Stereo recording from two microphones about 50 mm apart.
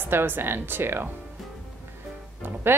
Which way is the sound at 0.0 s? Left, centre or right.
Right.